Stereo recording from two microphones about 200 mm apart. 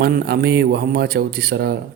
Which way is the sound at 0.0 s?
55° right (ahead or behind).